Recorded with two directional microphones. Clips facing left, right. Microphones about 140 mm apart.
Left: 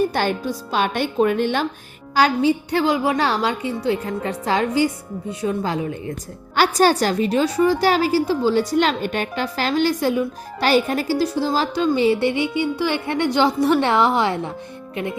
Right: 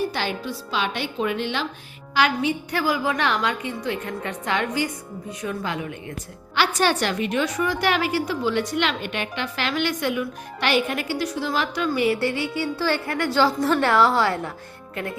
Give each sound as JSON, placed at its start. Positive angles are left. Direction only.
{"t": 0.0, "sound": "a woman's voice", "side_deg": 50}
{"t": 2.1, "sound": "a woman's voice", "side_deg": 35}